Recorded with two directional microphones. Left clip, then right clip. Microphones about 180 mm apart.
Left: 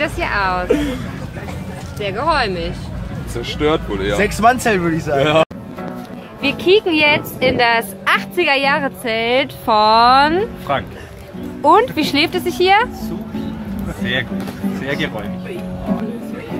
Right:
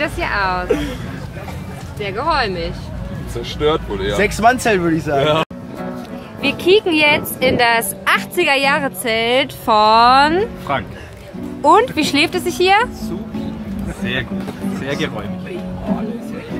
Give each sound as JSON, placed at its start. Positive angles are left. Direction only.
{"t": 0.0, "sound": "speech", "side_deg": 0}
{"t": 0.7, "sound": "speech", "side_deg": 25}
{"t": 2.0, "sound": "speech", "side_deg": 0}
{"t": 3.4, "sound": "speech", "side_deg": 35}
{"t": 4.2, "sound": "speech", "side_deg": -30}
{"t": 5.2, "sound": "speech", "side_deg": 35}
{"t": 6.4, "sound": "a woman's voice", "side_deg": -5}
{"t": 11.6, "sound": "speech", "side_deg": 0}
{"t": 15.0, "sound": "speech", "side_deg": 15}